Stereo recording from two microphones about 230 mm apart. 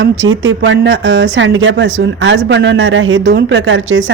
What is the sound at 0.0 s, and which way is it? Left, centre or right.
Speech, right.